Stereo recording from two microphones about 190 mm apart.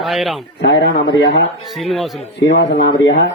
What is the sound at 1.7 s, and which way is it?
Speech, centre (ahead or behind).